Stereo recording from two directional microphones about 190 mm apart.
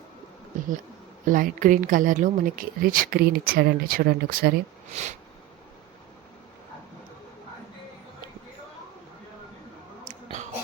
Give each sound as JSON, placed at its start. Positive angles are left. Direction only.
{"t": 0.5, "sound": "a woman's voice", "side_deg": -45}